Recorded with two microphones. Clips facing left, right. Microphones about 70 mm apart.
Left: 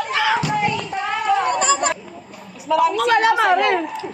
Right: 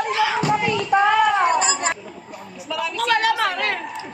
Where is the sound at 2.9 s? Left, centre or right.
Left.